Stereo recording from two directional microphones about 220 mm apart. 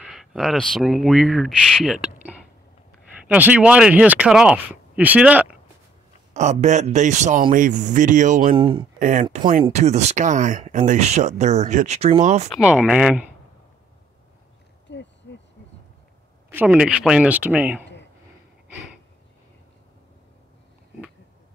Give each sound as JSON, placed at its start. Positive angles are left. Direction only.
{"t": 0.0, "sound": "speech", "side_deg": 0}
{"t": 3.3, "sound": "speech", "side_deg": -5}
{"t": 6.3, "sound": "speech", "side_deg": -30}
{"t": 8.5, "sound": "speech", "side_deg": -25}
{"t": 9.0, "sound": "speech", "side_deg": -35}
{"t": 12.5, "sound": "speech", "side_deg": -5}
{"t": 14.9, "sound": "a sound", "side_deg": 55}
{"t": 16.4, "sound": "speech", "side_deg": -5}